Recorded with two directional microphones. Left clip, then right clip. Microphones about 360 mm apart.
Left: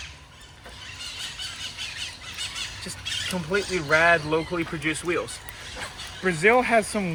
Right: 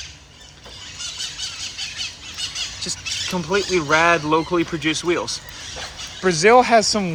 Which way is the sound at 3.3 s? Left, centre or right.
Centre.